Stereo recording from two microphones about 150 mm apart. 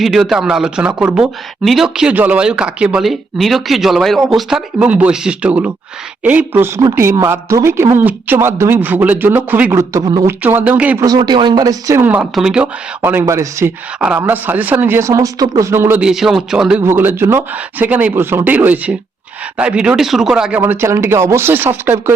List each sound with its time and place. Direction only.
0.0 s a man's voice: centre (ahead or behind)
9.9 s speech: 25° right (ahead or behind)
10.4 s a man's voice: 10° right (ahead or behind)
11.0 s speech: 25° right (ahead or behind)
12.0 s a man's voice: 10° right (ahead or behind)
16.0 s speech: 5° right (ahead or behind)
16.8 s a man's voice: 15° right (ahead or behind)